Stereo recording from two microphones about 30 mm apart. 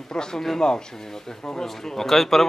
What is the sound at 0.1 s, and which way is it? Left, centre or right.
Speech, left.